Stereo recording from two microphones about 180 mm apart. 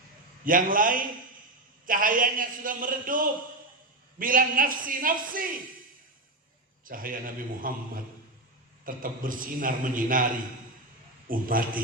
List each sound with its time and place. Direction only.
0.4 s a man's voice: 50° right (ahead or behind)
6.8 s a man's voice: 50° right (ahead or behind)
8.8 s a man's voice: 50° right (ahead or behind)